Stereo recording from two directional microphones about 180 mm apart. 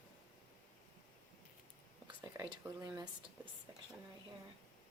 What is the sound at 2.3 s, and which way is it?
Speech, 20° right (ahead or behind).